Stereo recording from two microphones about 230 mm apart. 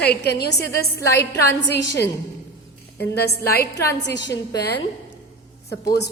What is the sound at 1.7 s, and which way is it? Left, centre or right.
A woman's voice, left.